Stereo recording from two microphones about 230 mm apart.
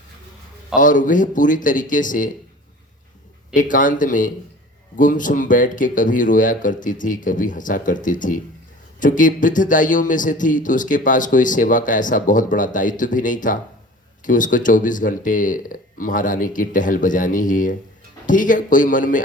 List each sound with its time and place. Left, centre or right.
0.8 s a man's voice: left
3.5 s a man's voice: left